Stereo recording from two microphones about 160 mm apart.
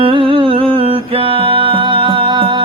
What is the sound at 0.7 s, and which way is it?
Music, 35° right (ahead or behind).